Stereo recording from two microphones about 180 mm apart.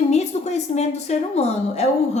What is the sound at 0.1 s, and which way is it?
A woman's voice, 40° left (ahead or behind).